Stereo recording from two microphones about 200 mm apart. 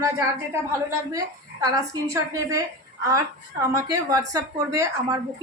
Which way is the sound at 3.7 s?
15° right (ahead or behind).